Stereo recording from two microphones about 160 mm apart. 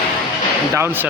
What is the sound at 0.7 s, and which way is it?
Speech, 15° right (ahead or behind).